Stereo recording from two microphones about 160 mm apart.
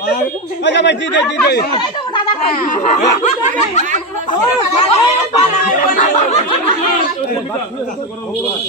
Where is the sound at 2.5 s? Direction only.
55° left (ahead or behind).